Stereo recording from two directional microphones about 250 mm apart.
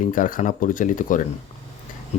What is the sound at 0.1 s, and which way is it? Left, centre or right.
Speech, left.